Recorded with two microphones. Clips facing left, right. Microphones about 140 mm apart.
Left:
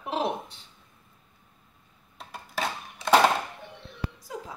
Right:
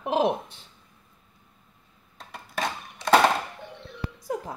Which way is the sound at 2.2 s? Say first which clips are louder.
Right 1 dB; 5° left (ahead or behind).